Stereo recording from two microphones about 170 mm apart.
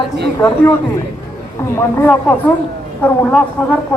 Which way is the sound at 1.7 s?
15° left (ahead or behind).